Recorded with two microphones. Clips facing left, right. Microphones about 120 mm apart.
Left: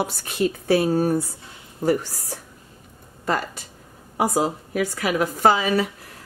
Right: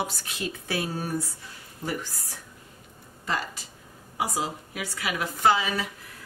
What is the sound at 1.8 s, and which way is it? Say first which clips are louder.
Speech: left 11 dB; 55° left (ahead or behind).